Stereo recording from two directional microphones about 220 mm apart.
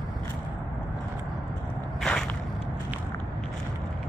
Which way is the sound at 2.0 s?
5° left (ahead or behind).